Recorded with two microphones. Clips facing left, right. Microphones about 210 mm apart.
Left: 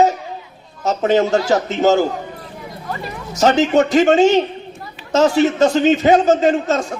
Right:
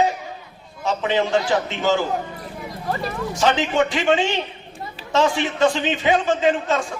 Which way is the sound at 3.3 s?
40° left (ahead or behind).